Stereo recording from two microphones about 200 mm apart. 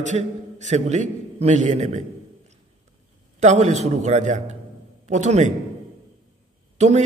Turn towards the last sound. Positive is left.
turn(degrees=-35)  # may be behind; listen again after turning